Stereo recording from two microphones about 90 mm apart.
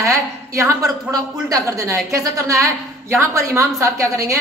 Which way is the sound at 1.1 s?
40° right (ahead or behind).